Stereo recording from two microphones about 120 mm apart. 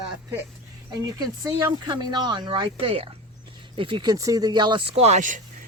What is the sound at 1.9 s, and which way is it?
Speech, 35° right (ahead or behind).